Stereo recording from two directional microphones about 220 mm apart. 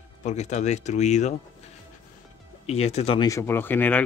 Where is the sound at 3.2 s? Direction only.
10° left (ahead or behind).